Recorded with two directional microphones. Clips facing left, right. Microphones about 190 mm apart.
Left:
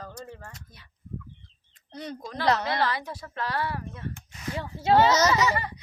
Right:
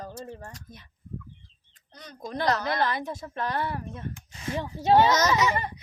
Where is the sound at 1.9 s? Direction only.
30° left (ahead or behind).